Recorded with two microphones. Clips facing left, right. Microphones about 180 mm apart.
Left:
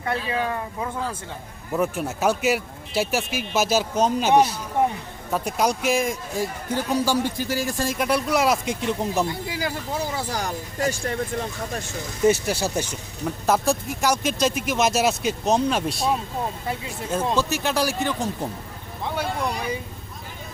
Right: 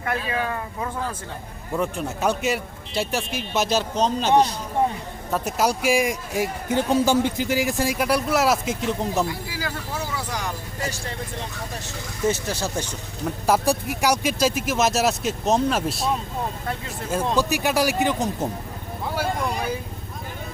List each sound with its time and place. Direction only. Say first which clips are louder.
0.0 s speech: left 1 dB; 25° left (ahead or behind)
1.7 s speech: left 1 dB; 5° left (ahead or behind)
5.3 s a man's voice: even; 5° right (ahead or behind)
7.9 s speech: left 2 dB; 5° right (ahead or behind)
9.2 s speech: left 2 dB; 20° left (ahead or behind)
9.9 s speech: left 2 dB; 35° left (ahead or behind)
12.3 s speech: left 3 dB; 10° left (ahead or behind)
13.5 s a man's voice: right 1 dB; 10° right (ahead or behind)
17.1 s a man's voice: right 1 dB; 10° right (ahead or behind)
19.0 s vehicle: right 1 dB; 5° right (ahead or behind)